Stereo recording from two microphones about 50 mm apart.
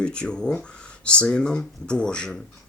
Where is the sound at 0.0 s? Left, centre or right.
Centre.